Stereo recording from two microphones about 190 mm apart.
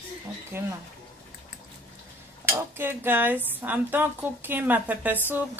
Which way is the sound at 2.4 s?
10° right (ahead or behind).